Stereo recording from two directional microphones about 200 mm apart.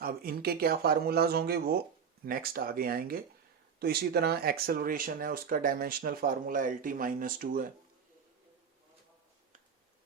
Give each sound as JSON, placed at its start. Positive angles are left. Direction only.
{"t": 0.0, "sound": "speech", "side_deg": -50}